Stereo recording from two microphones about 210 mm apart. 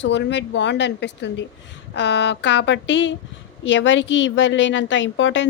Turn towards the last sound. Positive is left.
turn(degrees=60)  # may be behind; listen again after turning